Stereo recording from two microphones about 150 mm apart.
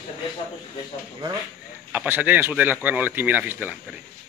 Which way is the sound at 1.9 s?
10° right (ahead or behind).